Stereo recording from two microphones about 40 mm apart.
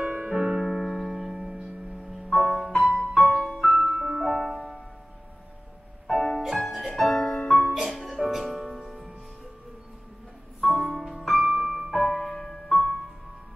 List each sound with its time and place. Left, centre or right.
0.0 s music: right
0.3 s music: centre
2.0 s music: centre
2.7 s music: centre
3.6 s music: centre
4.6 s music: centre
6.1 s music: centre
7.1 s music: centre
7.7 s music: centre
10.6 s music: centre